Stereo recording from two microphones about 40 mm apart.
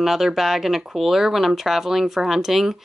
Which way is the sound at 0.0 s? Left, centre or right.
Centre.